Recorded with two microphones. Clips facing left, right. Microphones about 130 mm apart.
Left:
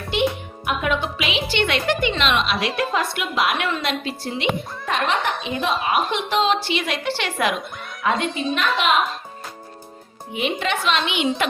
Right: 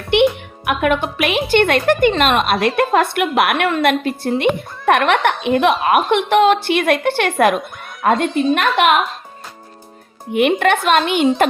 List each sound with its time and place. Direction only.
0.1 s speech: 65° right (ahead or behind)
8.1 s a woman's voice: centre (ahead or behind)
8.5 s speech: 60° right (ahead or behind)
10.3 s speech: 60° right (ahead or behind)